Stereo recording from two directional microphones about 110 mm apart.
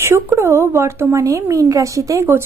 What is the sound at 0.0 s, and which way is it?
Speech, 25° right (ahead or behind).